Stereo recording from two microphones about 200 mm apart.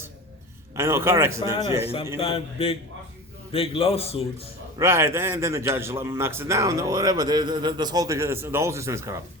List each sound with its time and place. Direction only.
0.8 s a man's voice: 15° right (ahead or behind)
2.1 s a man's voice: 30° left (ahead or behind)
4.8 s a man's voice: 15° right (ahead or behind)